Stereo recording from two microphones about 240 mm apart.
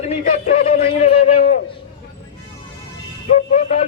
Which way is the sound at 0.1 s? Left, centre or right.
Left.